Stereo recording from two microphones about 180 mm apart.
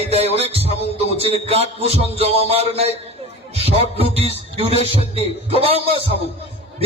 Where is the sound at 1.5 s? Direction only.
35° right (ahead or behind).